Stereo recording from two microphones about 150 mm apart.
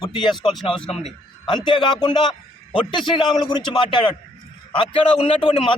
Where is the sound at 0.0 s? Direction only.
30° left (ahead or behind).